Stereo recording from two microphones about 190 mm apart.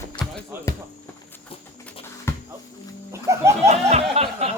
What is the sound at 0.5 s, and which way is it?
Music, 10° right (ahead or behind).